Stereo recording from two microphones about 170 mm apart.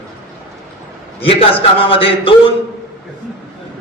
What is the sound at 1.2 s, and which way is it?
A man's voice, 35° left (ahead or behind).